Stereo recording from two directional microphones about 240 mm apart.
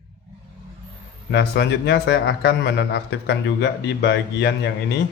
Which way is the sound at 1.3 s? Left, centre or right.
Left.